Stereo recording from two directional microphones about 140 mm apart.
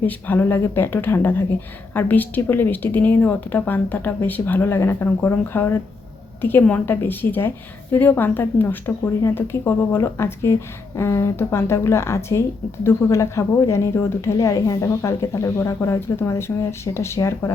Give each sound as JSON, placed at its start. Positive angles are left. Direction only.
{"t": 0.0, "sound": "a woman's voice", "side_deg": 10}